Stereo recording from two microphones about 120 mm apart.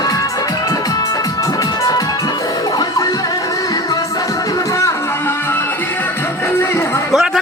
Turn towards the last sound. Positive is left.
turn(degrees=0)  # may be behind; listen again after turning